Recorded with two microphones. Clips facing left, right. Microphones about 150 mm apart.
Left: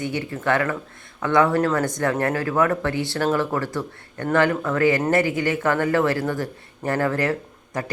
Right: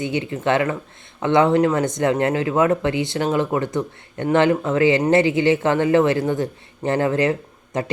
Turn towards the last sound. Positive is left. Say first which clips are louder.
# right 4 dB
turn(degrees=-20)  # may be behind; listen again after turning